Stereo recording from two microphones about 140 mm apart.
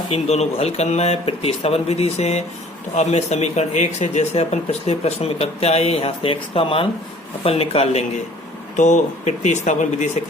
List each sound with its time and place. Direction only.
0.3 s speech: 50° left (ahead or behind)
8.7 s speech: 60° left (ahead or behind)